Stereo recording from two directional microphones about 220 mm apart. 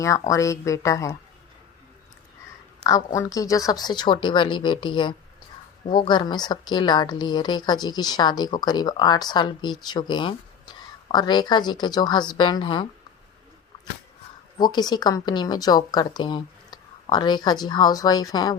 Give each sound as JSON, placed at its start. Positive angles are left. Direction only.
{"t": 0.0, "sound": "speech", "side_deg": 15}
{"t": 2.8, "sound": "a woman's voice", "side_deg": 15}
{"t": 14.6, "sound": "a woman's voice", "side_deg": 20}